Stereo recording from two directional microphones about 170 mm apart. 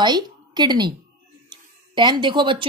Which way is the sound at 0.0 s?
25° right (ahead or behind).